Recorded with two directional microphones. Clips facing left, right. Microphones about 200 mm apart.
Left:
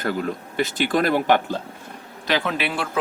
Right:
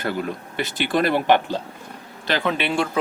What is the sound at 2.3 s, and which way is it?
Speech, centre (ahead or behind).